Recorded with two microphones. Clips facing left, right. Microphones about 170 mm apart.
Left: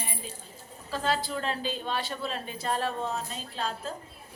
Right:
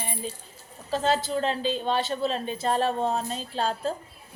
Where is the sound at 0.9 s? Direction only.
25° right (ahead or behind).